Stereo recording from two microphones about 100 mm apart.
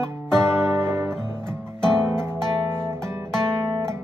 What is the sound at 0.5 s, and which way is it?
Music, 25° right (ahead or behind).